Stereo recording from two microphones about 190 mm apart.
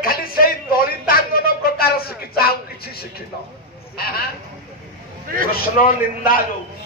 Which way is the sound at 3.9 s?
55° left (ahead or behind).